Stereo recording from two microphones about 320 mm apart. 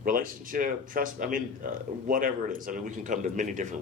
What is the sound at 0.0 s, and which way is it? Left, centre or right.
A man's voice, right.